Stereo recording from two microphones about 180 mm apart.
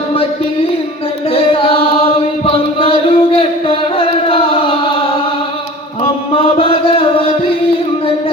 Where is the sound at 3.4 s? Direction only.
30° left (ahead or behind).